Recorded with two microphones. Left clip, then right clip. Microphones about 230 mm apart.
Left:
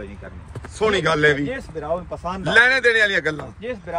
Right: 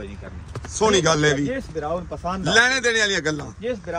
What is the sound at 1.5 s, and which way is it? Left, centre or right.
Speech, left.